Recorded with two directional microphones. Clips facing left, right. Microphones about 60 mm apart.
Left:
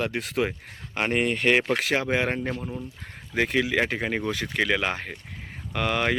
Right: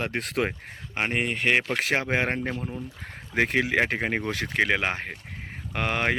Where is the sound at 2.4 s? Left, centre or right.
Centre.